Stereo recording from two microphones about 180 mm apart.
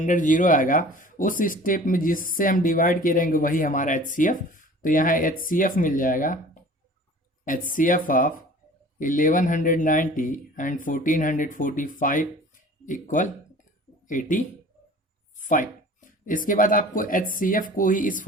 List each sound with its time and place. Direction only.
0.0 s speech: 45° left (ahead or behind)